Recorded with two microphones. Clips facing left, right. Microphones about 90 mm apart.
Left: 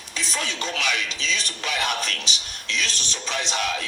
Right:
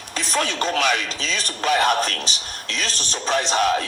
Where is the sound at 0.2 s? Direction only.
50° right (ahead or behind).